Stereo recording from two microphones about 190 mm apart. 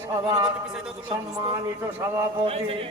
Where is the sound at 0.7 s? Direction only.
Centre (ahead or behind).